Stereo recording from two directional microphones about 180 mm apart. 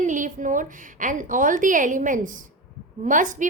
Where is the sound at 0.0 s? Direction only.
45° right (ahead or behind).